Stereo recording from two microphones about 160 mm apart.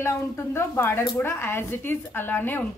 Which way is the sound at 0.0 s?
15° left (ahead or behind).